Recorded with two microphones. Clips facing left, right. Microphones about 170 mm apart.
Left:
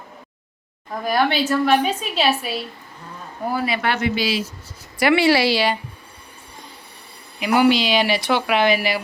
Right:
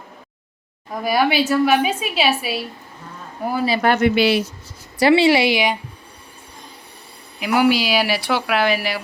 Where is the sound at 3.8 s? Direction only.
50° right (ahead or behind).